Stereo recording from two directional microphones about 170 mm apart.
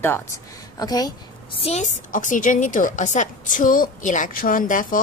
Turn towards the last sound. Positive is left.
turn(degrees=50)  # may be behind; listen again after turning